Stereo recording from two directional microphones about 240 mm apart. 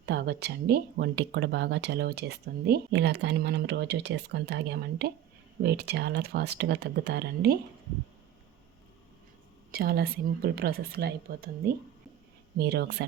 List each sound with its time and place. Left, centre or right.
0.0 s speech: right
9.7 s a woman's voice: right
12.5 s a woman's voice: right